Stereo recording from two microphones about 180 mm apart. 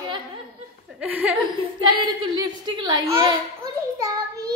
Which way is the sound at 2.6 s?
25° right (ahead or behind).